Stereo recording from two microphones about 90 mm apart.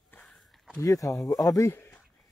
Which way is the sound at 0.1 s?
15° left (ahead or behind).